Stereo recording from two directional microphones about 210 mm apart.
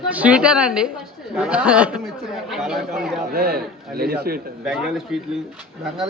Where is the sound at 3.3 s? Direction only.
45° right (ahead or behind).